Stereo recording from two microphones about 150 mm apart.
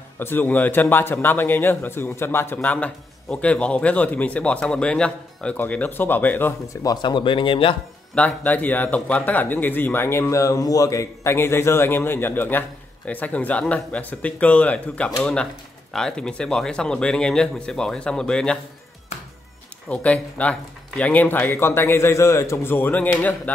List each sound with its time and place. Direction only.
0.2 s a man's voice: 15° left (ahead or behind); by 7.7 s 35° left (ahead or behind)
8.1 s a man's voice: 10° left (ahead or behind)
19.9 s a man's voice: 10° left (ahead or behind)